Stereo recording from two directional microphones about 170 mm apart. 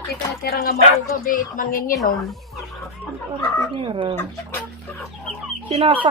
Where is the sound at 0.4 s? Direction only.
65° left (ahead or behind).